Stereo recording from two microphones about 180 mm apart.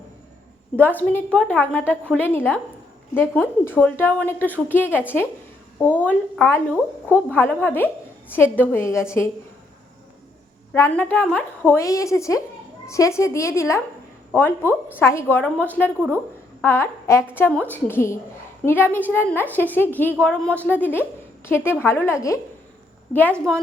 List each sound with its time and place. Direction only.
0.8 s a woman's voice: 10° left (ahead or behind)
3.6 s a woman's voice: 10° left (ahead or behind)
10.8 s a woman's voice: 10° left (ahead or behind)